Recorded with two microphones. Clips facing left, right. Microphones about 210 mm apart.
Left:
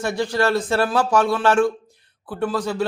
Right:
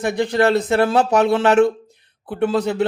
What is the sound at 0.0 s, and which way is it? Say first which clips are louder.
Speech: right 4 dB; 20° right (ahead or behind).